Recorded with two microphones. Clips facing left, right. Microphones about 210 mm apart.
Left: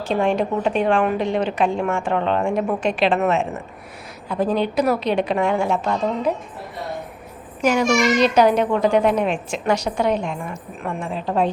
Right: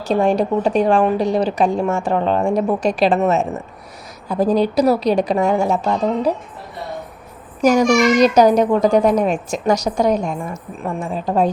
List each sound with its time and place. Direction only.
0.0 s a child's voice: 40° right (ahead or behind)
7.6 s a child's voice: 40° right (ahead or behind)